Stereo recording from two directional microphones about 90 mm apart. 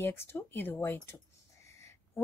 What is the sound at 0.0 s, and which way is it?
A woman's voice, 25° left (ahead or behind).